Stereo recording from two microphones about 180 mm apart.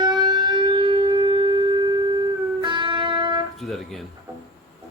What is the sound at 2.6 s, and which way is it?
Music, 25° right (ahead or behind).